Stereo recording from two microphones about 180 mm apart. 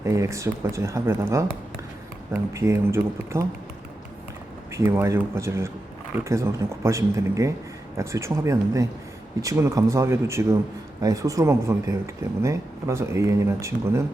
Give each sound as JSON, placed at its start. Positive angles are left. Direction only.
{"t": 0.0, "sound": "speech", "side_deg": -15}
{"t": 4.7, "sound": "speech", "side_deg": -15}